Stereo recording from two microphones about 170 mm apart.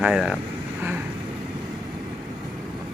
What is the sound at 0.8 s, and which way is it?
Vehicle, 10° right (ahead or behind).